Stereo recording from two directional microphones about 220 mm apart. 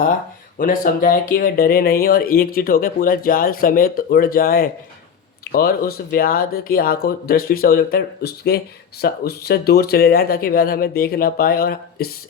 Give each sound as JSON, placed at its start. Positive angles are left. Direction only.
{"t": 0.6, "sound": "speech", "side_deg": 40}